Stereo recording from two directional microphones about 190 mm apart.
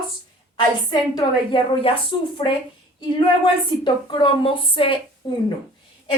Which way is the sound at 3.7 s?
25° left (ahead or behind).